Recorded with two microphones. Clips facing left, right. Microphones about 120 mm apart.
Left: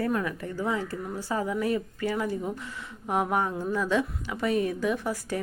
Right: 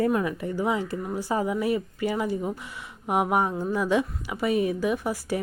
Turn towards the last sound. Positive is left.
turn(degrees=-10)  # may be behind; listen again after turning